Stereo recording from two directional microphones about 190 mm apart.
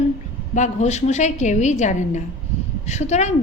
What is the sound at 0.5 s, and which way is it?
A woman's voice, 40° left (ahead or behind).